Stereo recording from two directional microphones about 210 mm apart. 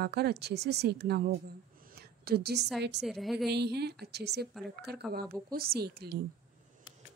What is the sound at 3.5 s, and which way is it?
A woman's voice, 50° right (ahead or behind).